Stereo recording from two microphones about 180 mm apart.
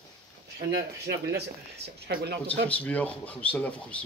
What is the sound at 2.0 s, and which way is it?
Speech, 65° right (ahead or behind).